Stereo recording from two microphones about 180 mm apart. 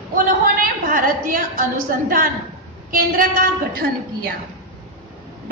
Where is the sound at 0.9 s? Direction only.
50° right (ahead or behind).